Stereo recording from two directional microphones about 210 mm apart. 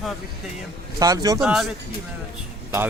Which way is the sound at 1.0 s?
15° right (ahead or behind).